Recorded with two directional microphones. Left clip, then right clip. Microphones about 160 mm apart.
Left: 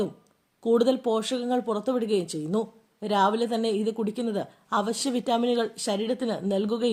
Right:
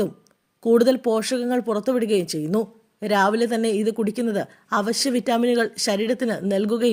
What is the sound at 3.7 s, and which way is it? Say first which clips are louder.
Speech: right 5 dB; 50° right (ahead or behind).